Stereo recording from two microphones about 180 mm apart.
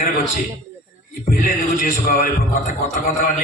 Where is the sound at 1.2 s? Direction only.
50° left (ahead or behind).